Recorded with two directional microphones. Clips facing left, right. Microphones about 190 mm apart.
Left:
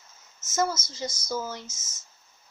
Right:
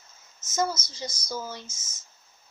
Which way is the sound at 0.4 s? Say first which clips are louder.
Left 1 dB; 15° right (ahead or behind).